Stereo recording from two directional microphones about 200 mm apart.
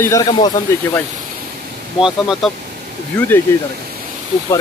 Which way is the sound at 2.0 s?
Centre (ahead or behind).